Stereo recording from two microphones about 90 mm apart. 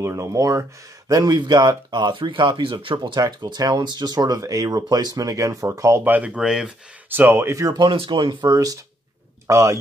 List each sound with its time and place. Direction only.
0.0 s speech: 35° right (ahead or behind); by 3.0 s 70° right (ahead or behind)
3.0 s speech: 50° right (ahead or behind); by 6.0 s 30° right (ahead or behind)
6.0 s speech: 15° right (ahead or behind)
7.1 s speech: 25° right (ahead or behind)
7.8 s speech: 70° right (ahead or behind); by 8.7 s 45° right (ahead or behind)
9.5 s speech: 35° right (ahead or behind)